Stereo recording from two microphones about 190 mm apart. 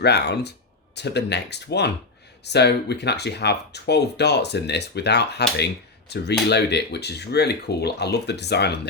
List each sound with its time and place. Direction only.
0.0 s speech: 60° left (ahead or behind)